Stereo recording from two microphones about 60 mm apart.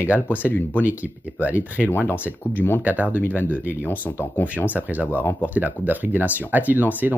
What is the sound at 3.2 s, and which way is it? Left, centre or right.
Speech, left.